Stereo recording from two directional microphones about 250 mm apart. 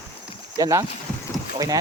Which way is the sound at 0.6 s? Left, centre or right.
Centre.